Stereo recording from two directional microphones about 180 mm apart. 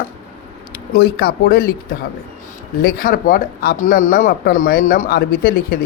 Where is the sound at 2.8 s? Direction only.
50° left (ahead or behind).